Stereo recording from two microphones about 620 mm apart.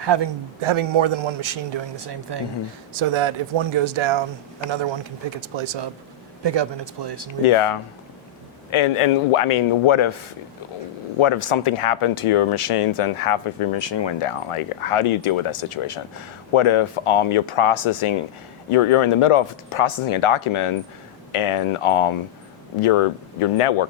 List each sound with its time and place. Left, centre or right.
0.0 s a man's voice: right
2.9 s a man's voice: right
7.4 s speech: left
11.2 s speech: left